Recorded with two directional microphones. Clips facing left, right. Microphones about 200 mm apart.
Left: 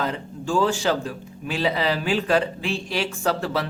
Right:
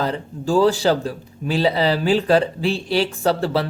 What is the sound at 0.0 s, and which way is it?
A man's voice, 35° right (ahead or behind).